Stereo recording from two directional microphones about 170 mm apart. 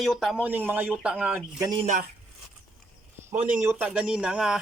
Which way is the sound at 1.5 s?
20° right (ahead or behind).